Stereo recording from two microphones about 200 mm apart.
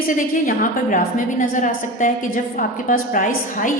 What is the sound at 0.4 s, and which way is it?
A woman's voice, 40° left (ahead or behind).